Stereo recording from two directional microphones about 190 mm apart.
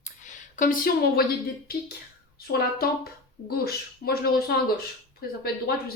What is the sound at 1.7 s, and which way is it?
Speech, 55° left (ahead or behind).